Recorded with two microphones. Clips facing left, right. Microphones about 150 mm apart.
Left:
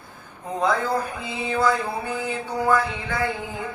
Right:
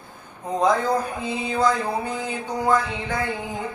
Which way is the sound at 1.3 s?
15° right (ahead or behind).